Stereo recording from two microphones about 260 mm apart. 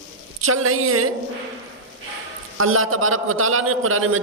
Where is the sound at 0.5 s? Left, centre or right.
Right.